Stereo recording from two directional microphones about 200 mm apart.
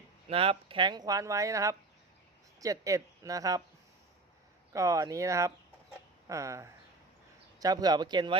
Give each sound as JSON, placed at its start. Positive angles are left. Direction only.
{"t": 0.3, "sound": "speech", "side_deg": -30}
{"t": 4.7, "sound": "speech", "side_deg": -15}